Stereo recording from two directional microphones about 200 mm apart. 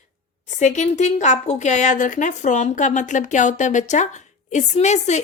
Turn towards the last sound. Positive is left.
turn(degrees=35)  # may be behind; listen again after turning